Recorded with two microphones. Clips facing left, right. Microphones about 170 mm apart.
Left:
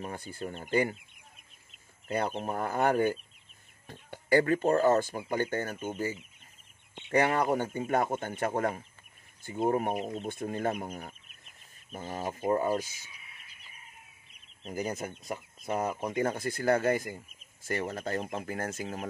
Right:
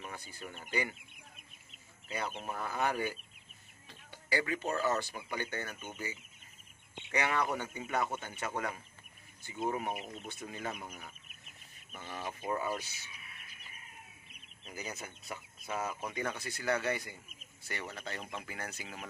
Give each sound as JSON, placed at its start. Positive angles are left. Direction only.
{"t": 0.0, "sound": "speech", "side_deg": 45}
{"t": 0.4, "sound": "speech", "side_deg": 35}
{"t": 0.7, "sound": "speech", "side_deg": 50}
{"t": 2.0, "sound": "speech", "side_deg": 55}
{"t": 14.6, "sound": "speech", "side_deg": 45}